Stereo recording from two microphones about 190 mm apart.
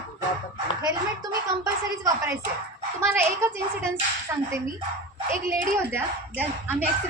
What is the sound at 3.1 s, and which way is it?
A woman's voice, 15° right (ahead or behind).